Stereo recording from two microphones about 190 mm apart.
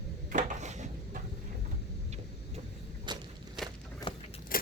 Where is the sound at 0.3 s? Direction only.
40° right (ahead or behind).